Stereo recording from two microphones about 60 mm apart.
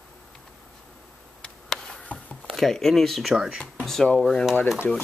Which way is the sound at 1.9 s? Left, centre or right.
Left.